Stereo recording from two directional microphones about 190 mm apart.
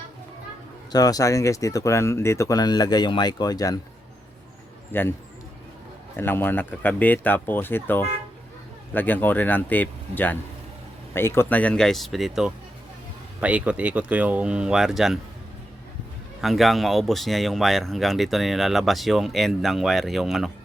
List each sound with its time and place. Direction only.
0.9 s speech: 20° left (ahead or behind)
4.9 s speech: 10° left (ahead or behind)
6.1 s speech: 10° left (ahead or behind)
16.4 s speech: centre (ahead or behind)